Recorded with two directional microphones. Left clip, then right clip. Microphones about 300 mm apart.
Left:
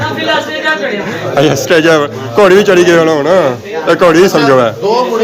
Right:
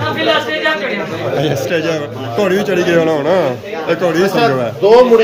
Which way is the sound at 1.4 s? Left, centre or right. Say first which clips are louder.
Left 11 dB; centre.